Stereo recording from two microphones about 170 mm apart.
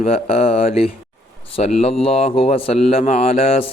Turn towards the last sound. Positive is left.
turn(degrees=35)  # may be behind; listen again after turning